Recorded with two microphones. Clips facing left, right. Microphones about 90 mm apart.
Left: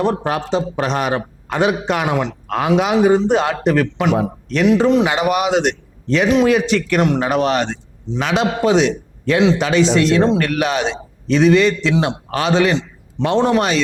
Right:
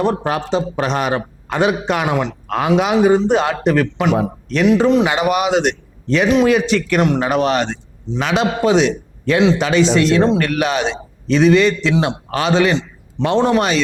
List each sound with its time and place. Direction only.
0.0 s a man's voice: 20° right (ahead or behind)